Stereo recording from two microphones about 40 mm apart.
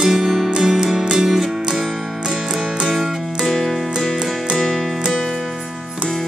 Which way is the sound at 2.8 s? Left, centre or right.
Centre.